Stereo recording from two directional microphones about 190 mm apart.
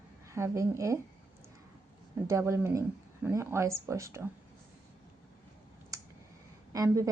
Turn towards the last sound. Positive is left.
turn(degrees=-15)  # may be behind; listen again after turning